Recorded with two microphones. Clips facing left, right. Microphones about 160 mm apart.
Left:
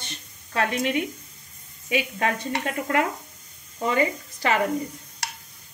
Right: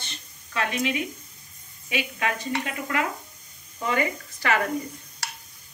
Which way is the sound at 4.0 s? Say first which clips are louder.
Left 3 dB; 25° left (ahead or behind).